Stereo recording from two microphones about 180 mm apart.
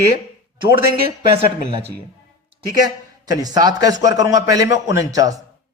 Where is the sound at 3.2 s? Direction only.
20° right (ahead or behind).